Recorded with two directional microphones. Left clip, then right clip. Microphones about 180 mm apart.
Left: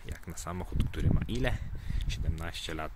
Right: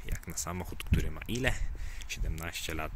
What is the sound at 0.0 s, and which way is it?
Speech, centre (ahead or behind).